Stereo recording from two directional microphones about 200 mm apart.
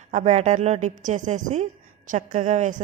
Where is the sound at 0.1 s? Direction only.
35° right (ahead or behind).